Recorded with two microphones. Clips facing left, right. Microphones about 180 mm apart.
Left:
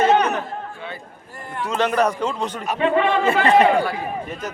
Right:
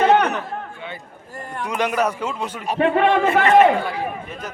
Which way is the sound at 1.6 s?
15° right (ahead or behind).